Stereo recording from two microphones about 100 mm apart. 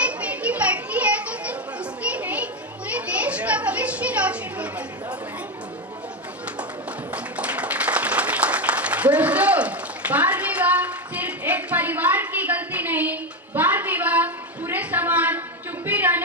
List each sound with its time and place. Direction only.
0.0 s children playing: 15° right (ahead or behind)
7.1 s applause: 15° right (ahead or behind)
15.9 s music: 15° right (ahead or behind)